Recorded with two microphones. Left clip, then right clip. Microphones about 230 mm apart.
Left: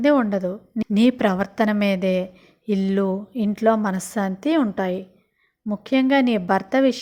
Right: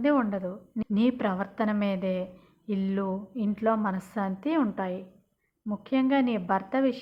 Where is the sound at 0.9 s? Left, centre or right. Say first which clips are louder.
Left 8 dB; left.